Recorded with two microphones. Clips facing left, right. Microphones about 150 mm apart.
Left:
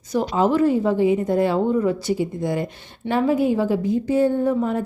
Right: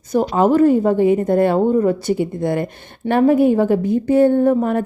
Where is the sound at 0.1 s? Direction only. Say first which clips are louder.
Right 4 dB; 50° right (ahead or behind).